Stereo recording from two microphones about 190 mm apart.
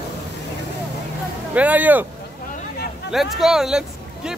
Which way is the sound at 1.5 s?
10° right (ahead or behind).